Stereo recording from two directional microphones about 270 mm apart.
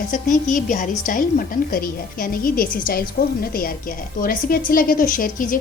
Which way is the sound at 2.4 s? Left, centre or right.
Left.